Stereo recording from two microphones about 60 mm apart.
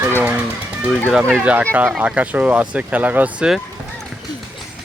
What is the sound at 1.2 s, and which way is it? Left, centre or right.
Speech, right.